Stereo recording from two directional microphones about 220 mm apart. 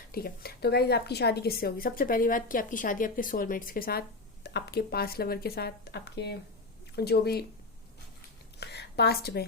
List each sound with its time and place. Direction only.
0.1 s speech: 45° left (ahead or behind)
8.5 s a woman's voice: 50° left (ahead or behind)